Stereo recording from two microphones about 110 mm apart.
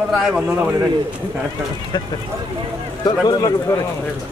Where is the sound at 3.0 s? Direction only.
35° left (ahead or behind).